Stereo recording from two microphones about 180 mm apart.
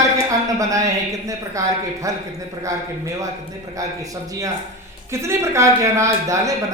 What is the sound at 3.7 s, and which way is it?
Speech, 20° right (ahead or behind).